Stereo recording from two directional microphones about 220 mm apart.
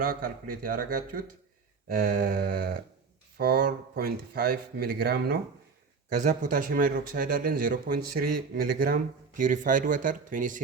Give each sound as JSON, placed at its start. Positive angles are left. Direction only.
{"t": 0.0, "sound": "speech", "side_deg": -40}